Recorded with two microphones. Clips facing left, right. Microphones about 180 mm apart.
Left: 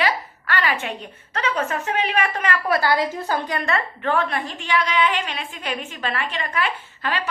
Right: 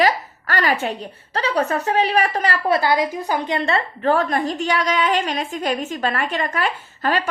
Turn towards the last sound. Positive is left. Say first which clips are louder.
# right 5 dB
turn(degrees=-45)  # may be behind; listen again after turning